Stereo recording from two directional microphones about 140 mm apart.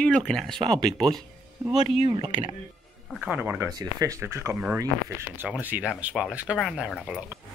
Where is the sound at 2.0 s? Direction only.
35° right (ahead or behind).